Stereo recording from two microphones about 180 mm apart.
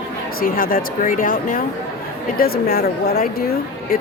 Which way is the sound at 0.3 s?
55° left (ahead or behind).